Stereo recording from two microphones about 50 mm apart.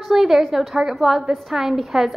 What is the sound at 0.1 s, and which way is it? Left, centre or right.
A woman's voice, centre.